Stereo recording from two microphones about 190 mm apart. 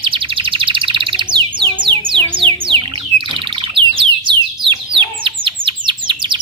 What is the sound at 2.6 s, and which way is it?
Bird, 25° right (ahead or behind).